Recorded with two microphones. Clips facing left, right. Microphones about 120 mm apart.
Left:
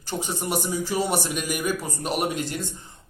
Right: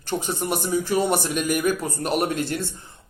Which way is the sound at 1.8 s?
15° left (ahead or behind).